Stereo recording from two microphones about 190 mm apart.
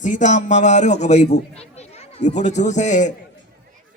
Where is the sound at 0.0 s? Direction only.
40° left (ahead or behind).